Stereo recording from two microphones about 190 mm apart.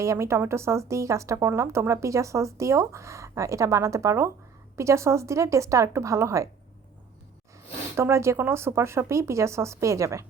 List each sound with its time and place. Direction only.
0.0 s speech: 15° right (ahead or behind)
7.9 s speech: 15° right (ahead or behind)